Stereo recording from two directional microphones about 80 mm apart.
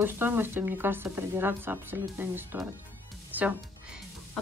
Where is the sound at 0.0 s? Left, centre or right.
Right.